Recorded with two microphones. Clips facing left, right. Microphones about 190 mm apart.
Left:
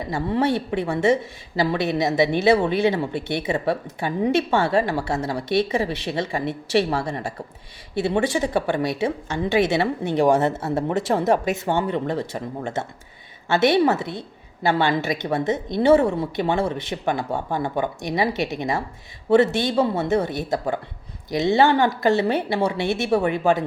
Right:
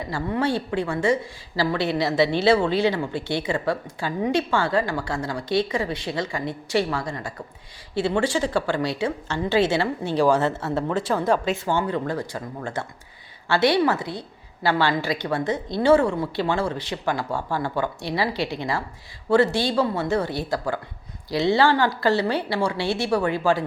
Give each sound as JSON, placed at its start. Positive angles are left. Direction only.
{"t": 0.1, "sound": "a woman's voice", "side_deg": 25}